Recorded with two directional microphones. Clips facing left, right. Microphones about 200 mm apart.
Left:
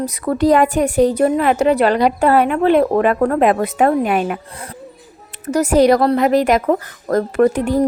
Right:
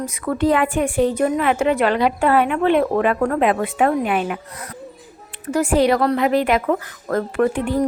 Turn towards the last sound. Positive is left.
turn(degrees=40)  # may be behind; listen again after turning